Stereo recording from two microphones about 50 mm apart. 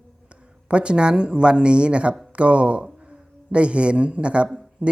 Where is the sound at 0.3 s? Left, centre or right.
Right.